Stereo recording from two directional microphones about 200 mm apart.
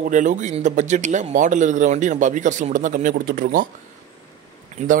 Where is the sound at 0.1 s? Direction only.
40° right (ahead or behind).